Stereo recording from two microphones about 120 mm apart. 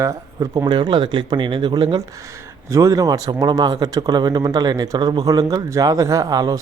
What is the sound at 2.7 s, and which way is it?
Speech, 25° right (ahead or behind).